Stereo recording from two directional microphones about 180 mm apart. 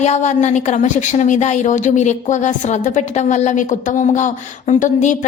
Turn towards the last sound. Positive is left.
turn(degrees=45)  # may be behind; listen again after turning